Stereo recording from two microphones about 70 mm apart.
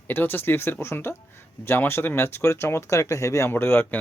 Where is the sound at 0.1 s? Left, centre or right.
Left.